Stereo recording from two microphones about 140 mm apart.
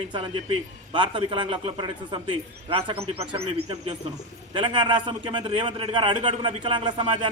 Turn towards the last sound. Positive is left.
turn(degrees=-35)  # may be behind; listen again after turning